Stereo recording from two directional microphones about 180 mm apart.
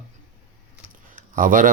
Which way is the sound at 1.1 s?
50° right (ahead or behind).